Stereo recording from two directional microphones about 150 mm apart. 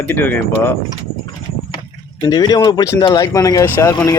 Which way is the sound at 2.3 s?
25° left (ahead or behind).